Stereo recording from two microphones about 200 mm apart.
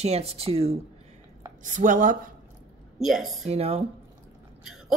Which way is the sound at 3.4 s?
30° right (ahead or behind).